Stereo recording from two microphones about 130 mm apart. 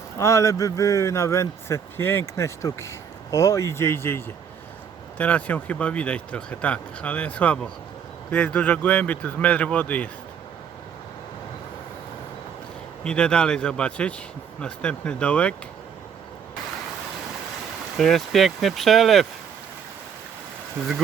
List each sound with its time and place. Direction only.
0.2 s a man's voice: 25° left (ahead or behind)
13.1 s speech: 5° left (ahead or behind)
17.9 s speech: centre (ahead or behind)